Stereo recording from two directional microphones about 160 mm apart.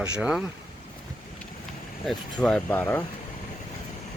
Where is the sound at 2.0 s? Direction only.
5° left (ahead or behind).